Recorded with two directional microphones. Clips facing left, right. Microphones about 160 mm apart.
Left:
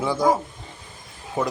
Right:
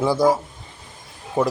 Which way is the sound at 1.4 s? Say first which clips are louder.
Right 4 dB; 35° right (ahead or behind).